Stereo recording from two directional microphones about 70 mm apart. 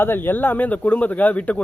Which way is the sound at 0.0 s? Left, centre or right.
Left.